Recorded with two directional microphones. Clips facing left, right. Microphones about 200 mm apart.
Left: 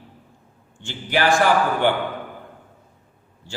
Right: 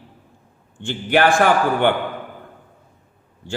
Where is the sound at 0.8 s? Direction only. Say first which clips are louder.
Right 5 dB; 55° right (ahead or behind).